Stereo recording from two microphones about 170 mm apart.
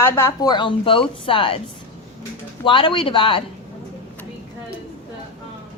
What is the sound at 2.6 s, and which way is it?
Speech, 30° left (ahead or behind).